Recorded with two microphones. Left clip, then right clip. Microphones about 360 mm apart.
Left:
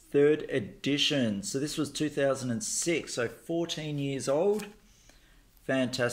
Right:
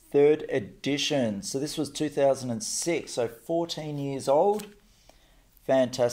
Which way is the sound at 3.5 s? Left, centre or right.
Right.